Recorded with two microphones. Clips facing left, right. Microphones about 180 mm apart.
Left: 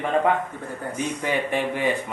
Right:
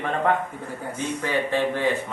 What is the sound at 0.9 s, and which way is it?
Speech, 15° left (ahead or behind).